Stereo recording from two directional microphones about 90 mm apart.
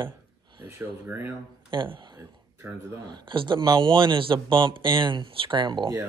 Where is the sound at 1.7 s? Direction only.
65° right (ahead or behind).